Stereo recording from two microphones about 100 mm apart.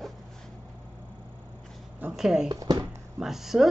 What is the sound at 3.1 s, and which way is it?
Speech, 5° right (ahead or behind).